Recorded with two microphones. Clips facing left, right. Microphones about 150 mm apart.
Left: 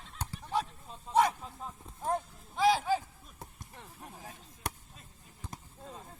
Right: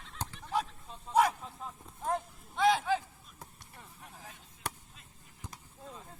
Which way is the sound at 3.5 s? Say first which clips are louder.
Left 3 dB; 40° left (ahead or behind).